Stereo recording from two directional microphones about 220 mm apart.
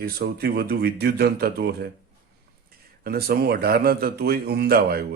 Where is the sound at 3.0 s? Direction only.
45° right (ahead or behind).